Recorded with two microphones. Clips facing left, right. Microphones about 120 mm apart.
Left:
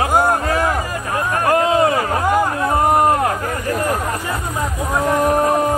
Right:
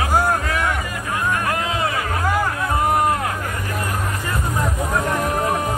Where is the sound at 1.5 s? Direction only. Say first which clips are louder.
Left 8 dB; 40° left (ahead or behind).